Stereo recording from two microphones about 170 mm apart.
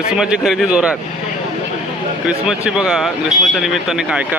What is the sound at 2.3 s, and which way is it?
Speech, 5° right (ahead or behind).